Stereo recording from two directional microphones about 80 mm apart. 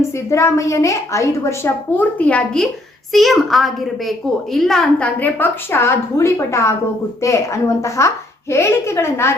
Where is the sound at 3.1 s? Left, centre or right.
Centre.